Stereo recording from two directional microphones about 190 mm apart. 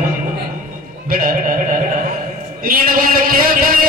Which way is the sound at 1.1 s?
50° right (ahead or behind).